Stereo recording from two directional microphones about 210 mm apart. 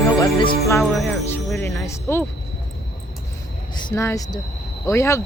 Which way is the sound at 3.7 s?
20° left (ahead or behind).